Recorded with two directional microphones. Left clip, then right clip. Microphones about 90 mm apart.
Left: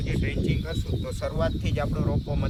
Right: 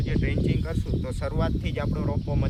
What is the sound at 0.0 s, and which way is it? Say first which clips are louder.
Speech: right 1 dB; 25° right (ahead or behind).